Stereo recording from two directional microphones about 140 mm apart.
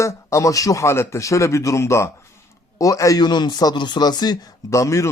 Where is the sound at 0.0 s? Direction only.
20° left (ahead or behind).